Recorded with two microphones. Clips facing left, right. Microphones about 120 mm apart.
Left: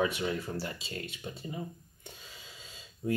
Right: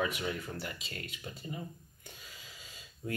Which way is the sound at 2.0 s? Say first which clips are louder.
Left 3 dB; 25° left (ahead or behind).